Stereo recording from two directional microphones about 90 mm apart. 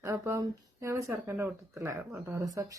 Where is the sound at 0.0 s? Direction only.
30° right (ahead or behind).